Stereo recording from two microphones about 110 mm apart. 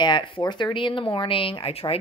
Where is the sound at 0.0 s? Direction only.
45° left (ahead or behind).